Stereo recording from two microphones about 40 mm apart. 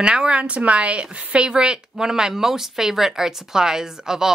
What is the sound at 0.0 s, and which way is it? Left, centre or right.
Speech, right.